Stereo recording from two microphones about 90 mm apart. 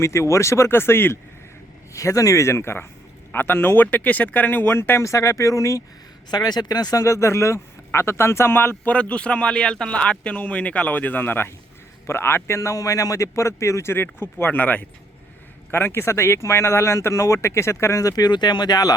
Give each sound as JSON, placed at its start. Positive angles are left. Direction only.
{"t": 0.0, "sound": "speech", "side_deg": 35}
{"t": 1.9, "sound": "speech", "side_deg": 35}
{"t": 6.3, "sound": "speech", "side_deg": 50}
{"t": 8.8, "sound": "speech", "side_deg": 15}
{"t": 18.3, "sound": "speech", "side_deg": 55}